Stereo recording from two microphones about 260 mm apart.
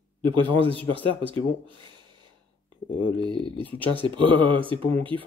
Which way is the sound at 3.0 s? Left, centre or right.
Centre.